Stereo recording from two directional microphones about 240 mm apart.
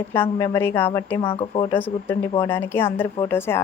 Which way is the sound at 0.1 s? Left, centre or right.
Centre.